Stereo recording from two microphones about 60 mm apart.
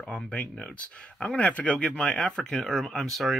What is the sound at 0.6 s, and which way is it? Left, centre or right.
Speech, centre.